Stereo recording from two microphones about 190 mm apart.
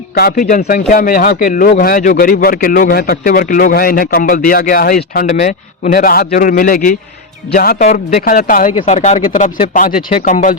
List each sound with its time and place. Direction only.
0.1 s a man's voice: 55° left (ahead or behind)
5.2 s a man's voice: 40° left (ahead or behind)